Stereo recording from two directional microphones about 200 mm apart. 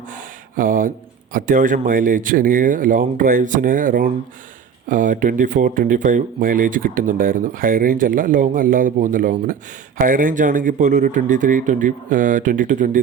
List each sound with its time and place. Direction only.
0.1 s speech: 45° right (ahead or behind)